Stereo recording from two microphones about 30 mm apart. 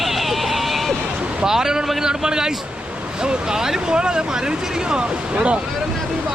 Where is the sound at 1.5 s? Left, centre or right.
Centre; by 5.6 s right.